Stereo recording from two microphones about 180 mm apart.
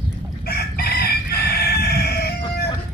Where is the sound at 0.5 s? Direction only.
60° left (ahead or behind).